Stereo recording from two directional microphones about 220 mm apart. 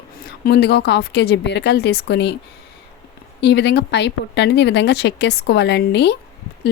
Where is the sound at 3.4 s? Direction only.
50° left (ahead or behind).